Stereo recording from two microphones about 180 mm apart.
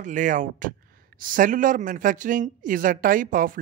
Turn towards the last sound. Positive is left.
turn(degrees=-50)  # may be behind; listen again after turning